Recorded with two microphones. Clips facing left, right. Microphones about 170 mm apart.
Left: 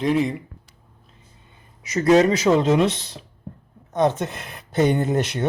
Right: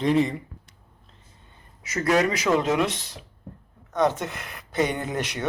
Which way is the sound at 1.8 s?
20° left (ahead or behind).